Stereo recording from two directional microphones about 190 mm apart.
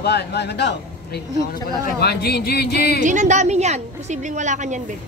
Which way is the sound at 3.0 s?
40° right (ahead or behind).